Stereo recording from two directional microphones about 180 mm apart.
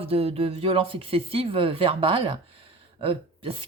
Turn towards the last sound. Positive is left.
turn(degrees=-30)  # may be behind; listen again after turning